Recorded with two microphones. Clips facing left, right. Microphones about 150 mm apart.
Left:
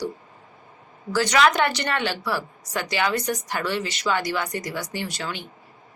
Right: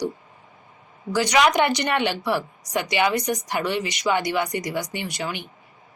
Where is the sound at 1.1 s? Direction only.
15° right (ahead or behind).